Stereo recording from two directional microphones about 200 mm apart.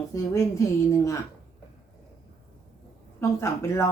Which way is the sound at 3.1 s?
10° left (ahead or behind).